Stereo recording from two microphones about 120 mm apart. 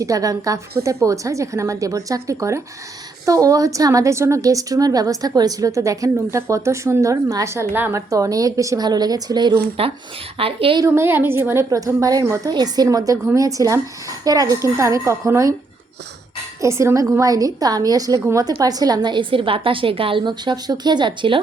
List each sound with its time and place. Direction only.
0.0 s a woman's voice: 30° right (ahead or behind)
9.8 s a woman's voice: 55° right (ahead or behind)
10.8 s a woman's voice: 25° right (ahead or behind)
16.6 s a woman's voice: 25° right (ahead or behind); by 21.4 s 45° right (ahead or behind)